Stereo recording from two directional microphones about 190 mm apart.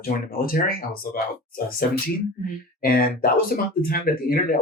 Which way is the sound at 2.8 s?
50° left (ahead or behind).